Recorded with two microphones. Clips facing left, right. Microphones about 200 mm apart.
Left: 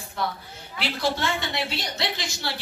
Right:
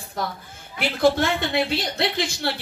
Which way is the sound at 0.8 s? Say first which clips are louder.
Right 7 dB; 55° right (ahead or behind).